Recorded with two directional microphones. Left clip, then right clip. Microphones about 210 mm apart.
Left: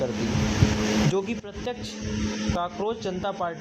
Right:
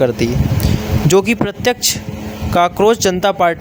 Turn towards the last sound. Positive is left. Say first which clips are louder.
# right 15 dB
turn(degrees=-50)  # may be behind; listen again after turning